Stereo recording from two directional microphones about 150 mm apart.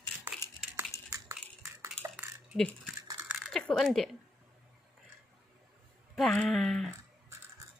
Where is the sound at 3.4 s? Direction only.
Centre (ahead or behind).